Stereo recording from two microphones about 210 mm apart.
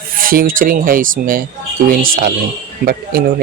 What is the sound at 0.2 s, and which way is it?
Speech, 45° right (ahead or behind).